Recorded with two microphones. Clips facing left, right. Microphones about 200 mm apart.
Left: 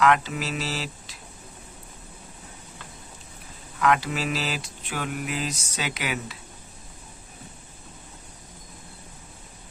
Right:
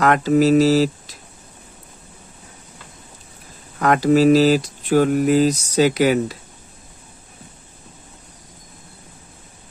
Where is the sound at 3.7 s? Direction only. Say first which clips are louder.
Right 9 dB; 45° right (ahead or behind).